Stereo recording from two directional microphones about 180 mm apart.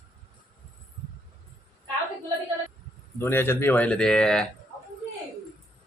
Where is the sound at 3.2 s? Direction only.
15° left (ahead or behind).